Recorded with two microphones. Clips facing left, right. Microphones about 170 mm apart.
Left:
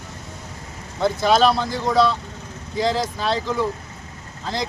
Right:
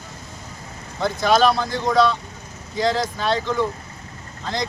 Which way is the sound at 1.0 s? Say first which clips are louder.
Left 1 dB; 5° left (ahead or behind).